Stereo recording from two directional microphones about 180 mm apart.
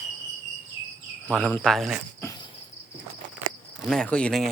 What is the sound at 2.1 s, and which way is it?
Cricket, 20° left (ahead or behind).